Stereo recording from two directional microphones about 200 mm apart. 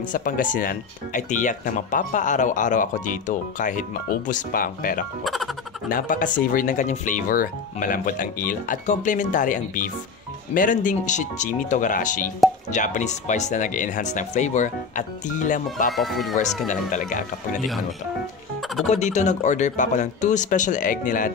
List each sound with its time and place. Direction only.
0.1 s speech: 40° left (ahead or behind)
5.2 s speech: centre (ahead or behind)
5.9 s speech: 45° left (ahead or behind)
15.9 s speech: centre (ahead or behind)
16.6 s speech: 40° left (ahead or behind)
18.9 s speech: 35° left (ahead or behind)